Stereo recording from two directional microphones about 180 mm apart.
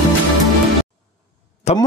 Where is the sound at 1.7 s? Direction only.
35° left (ahead or behind).